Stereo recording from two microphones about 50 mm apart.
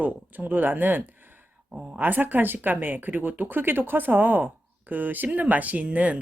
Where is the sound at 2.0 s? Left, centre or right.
Right.